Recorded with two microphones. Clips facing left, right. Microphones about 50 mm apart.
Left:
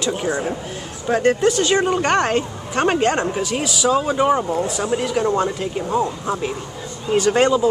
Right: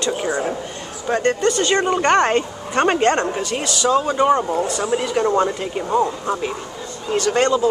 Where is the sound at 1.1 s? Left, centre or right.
Centre.